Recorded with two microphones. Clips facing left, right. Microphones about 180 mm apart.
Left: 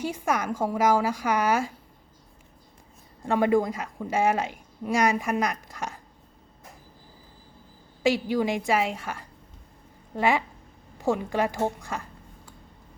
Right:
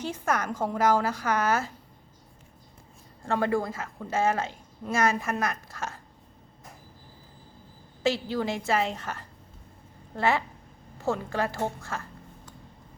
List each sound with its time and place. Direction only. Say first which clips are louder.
0.0 s a woman's voice: left 2 dB; 10° left (ahead or behind)
3.2 s a woman's voice: left 4 dB; 15° left (ahead or behind)
8.0 s a woman's voice: left 3 dB; 15° left (ahead or behind)